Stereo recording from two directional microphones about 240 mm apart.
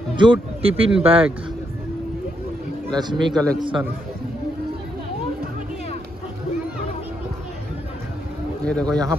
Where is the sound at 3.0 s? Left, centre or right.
Centre.